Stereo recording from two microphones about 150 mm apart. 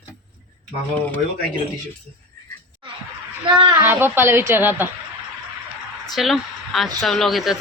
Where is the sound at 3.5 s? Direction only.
30° right (ahead or behind).